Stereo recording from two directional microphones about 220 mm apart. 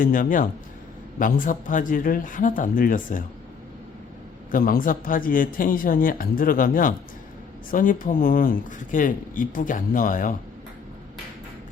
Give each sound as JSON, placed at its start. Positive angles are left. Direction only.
{"t": 0.0, "sound": "speech", "side_deg": 40}
{"t": 4.5, "sound": "speech", "side_deg": 40}